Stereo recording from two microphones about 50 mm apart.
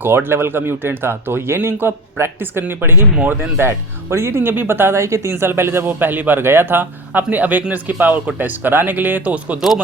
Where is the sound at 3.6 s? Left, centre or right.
Right.